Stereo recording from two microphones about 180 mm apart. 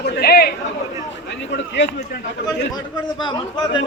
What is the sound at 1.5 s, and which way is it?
Speech, 80° left.